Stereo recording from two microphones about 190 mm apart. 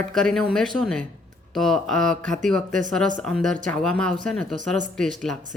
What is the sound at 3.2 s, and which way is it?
Speech, centre (ahead or behind).